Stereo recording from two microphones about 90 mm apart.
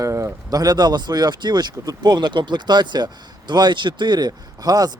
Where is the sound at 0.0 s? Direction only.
35° right (ahead or behind).